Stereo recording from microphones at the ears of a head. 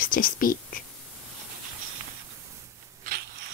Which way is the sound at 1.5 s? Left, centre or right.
Right.